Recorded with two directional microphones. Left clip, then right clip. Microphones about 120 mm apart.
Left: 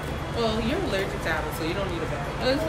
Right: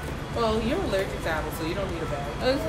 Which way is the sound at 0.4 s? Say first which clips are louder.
Right 1 dB; 35° right (ahead or behind).